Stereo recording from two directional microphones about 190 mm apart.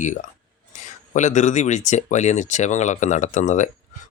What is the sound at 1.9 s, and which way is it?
Speech, 40° left (ahead or behind).